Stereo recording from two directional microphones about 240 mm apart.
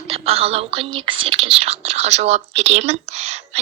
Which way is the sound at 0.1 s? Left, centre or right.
Right.